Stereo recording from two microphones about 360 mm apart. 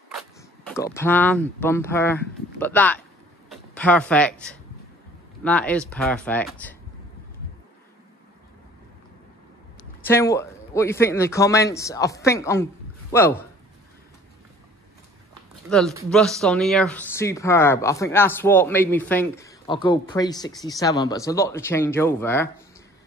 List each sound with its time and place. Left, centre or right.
0.1 s a sound: centre
0.9 s speech: centre
10.0 s speech: centre
16.1 s speech: centre